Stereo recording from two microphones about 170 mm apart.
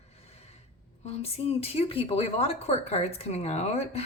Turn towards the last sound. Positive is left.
turn(degrees=40)  # may be behind; listen again after turning